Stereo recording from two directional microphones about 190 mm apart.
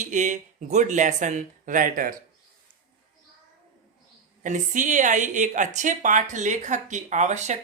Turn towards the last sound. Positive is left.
turn(degrees=-40)  # may be behind; listen again after turning